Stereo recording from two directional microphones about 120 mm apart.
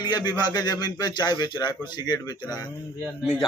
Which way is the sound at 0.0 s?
35° left (ahead or behind).